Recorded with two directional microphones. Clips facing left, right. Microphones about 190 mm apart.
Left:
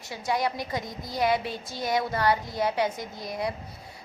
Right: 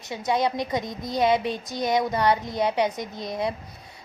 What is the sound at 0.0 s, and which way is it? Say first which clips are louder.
A woman's voice: right 4 dB; 20° right (ahead or behind).